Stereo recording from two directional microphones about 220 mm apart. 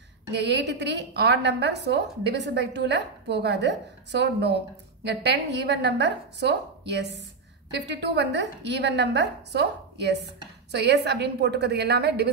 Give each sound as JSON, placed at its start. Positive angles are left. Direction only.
{"t": 0.3, "sound": "a woman's voice", "side_deg": -50}